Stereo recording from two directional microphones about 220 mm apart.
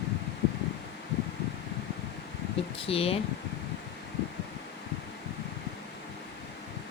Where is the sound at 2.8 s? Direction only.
25° left (ahead or behind).